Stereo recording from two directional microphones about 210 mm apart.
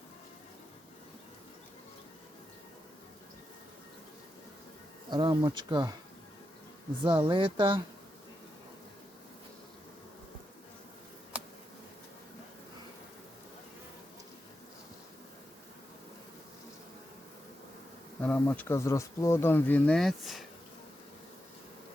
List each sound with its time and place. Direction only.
5.0 s speech: 20° right (ahead or behind)
7.0 s speech: 25° right (ahead or behind)
18.2 s speech: 5° left (ahead or behind)